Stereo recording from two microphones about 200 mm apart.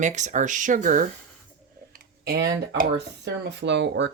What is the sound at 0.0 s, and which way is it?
Speech, 35° right (ahead or behind).